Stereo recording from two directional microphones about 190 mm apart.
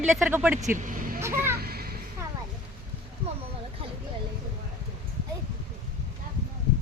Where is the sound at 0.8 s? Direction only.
45° right (ahead or behind).